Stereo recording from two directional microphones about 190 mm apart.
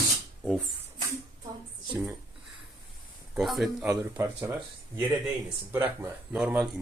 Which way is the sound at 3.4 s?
Centre (ahead or behind).